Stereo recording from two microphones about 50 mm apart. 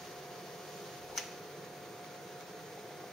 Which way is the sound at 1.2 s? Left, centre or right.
Centre.